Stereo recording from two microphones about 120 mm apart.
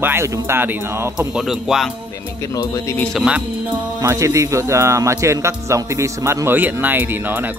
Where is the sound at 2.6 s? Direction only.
20° left (ahead or behind).